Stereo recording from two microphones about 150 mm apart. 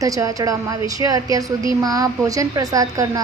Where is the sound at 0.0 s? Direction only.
25° right (ahead or behind).